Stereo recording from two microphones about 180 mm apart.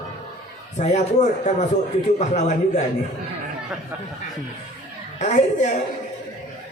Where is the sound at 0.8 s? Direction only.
40° left (ahead or behind).